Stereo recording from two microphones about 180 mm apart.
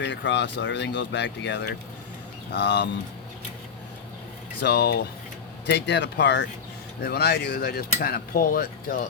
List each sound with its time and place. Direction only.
0.0 s speech: 80° left
4.6 s cutlery: 65° left (ahead or behind)
5.6 s speech: 70° left (ahead or behind)
7.0 s cutlery: 65° left (ahead or behind)